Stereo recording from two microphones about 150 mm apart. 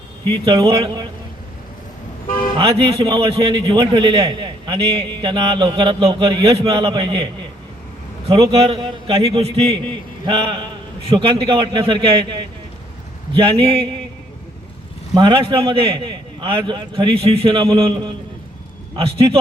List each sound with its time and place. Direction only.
0.3 s a man's voice: 30° right (ahead or behind)
2.6 s a man's voice: 40° right (ahead or behind)
8.3 s a man's voice: 35° right (ahead or behind)
15.1 s a man's voice: 30° right (ahead or behind)